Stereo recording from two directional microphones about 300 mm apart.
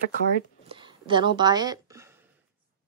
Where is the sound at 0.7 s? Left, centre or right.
Centre.